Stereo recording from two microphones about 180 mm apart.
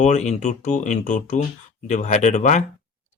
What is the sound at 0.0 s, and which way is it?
Speech, 40° left (ahead or behind).